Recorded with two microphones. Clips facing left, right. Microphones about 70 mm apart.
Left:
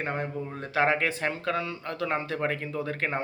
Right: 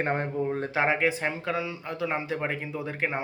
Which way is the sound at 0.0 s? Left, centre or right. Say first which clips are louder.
Right 4 dB; right.